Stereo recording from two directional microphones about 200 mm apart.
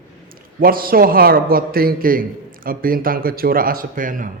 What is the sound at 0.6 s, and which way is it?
A man's voice, 45° right (ahead or behind).